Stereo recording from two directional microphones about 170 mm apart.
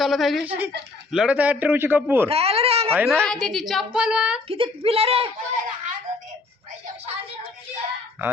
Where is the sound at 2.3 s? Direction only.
35° right (ahead or behind).